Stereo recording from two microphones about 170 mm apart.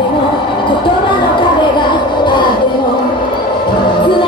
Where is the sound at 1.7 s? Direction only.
25° left (ahead or behind).